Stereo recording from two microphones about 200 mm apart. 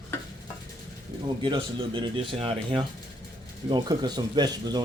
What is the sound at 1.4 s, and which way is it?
Speech, 25° right (ahead or behind).